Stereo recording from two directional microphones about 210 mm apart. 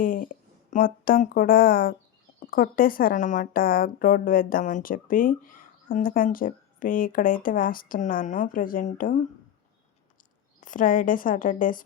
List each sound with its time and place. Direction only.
0.0 s a woman's voice: 40° left (ahead or behind)
10.6 s a woman's voice: 40° left (ahead or behind)